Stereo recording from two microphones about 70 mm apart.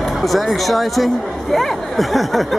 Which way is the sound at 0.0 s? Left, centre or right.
Centre.